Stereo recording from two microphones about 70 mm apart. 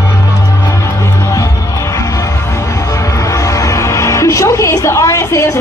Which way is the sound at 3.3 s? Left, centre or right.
Left.